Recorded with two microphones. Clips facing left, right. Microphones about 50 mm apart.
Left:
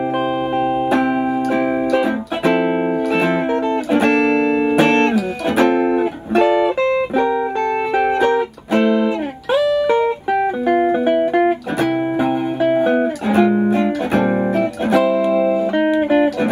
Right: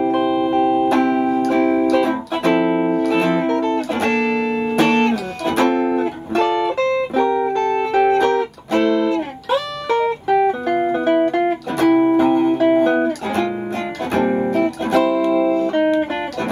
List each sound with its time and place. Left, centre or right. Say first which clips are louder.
0.0 s music: right 2 dB; centre